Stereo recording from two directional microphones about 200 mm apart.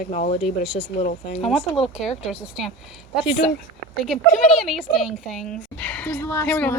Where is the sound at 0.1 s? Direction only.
35° left (ahead or behind).